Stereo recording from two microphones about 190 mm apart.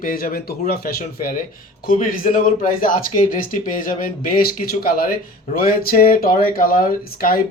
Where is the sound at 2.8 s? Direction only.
45° left (ahead or behind).